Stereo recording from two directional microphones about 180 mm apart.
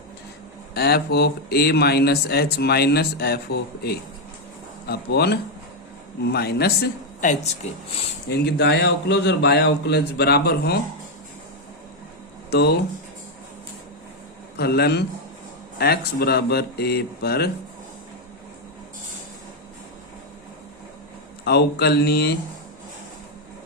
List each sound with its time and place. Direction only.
0.7 s speech: 60° left (ahead or behind)
7.2 s speech: 40° left (ahead or behind)
8.3 s a man's voice: 65° left (ahead or behind)
12.5 s speech: 65° left (ahead or behind)
14.5 s speech: 65° left (ahead or behind)
21.4 s speech: 65° left (ahead or behind)